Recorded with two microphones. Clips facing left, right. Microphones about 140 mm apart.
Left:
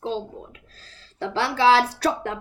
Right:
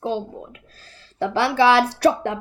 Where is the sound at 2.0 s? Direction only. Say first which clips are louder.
Right 6 dB; 70° right (ahead or behind).